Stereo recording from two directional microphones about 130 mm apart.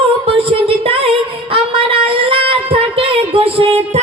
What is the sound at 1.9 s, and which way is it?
Singing, 45° right (ahead or behind).